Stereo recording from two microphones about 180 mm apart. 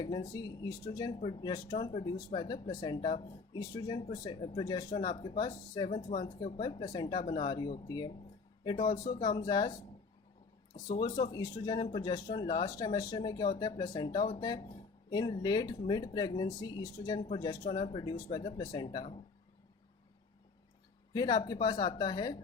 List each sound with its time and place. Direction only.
0.0 s speech: 20° left (ahead or behind)
10.8 s speech: 20° left (ahead or behind)
21.1 s speech: 25° left (ahead or behind)